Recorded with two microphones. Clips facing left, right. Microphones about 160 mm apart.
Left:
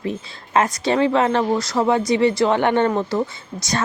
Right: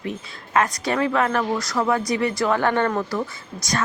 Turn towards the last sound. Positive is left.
turn(degrees=25)  # may be behind; listen again after turning